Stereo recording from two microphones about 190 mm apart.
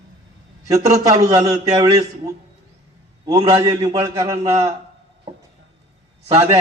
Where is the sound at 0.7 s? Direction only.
15° right (ahead or behind).